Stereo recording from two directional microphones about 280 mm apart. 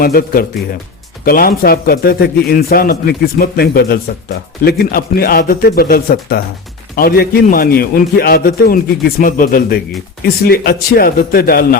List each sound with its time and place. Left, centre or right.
0.0 s a man's voice: left